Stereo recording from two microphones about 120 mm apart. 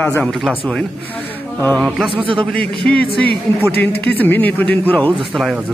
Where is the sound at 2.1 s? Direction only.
45° right (ahead or behind).